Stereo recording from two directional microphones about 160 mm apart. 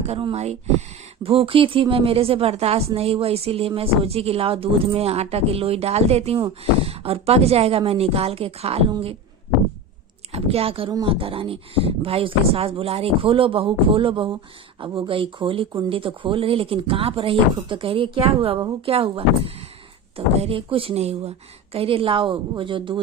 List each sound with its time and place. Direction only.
0.0 s speech: 35° right (ahead or behind)
10.3 s speech: 40° right (ahead or behind)